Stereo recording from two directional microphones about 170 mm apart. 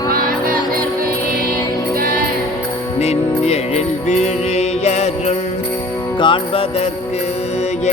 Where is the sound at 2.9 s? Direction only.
40° left (ahead or behind).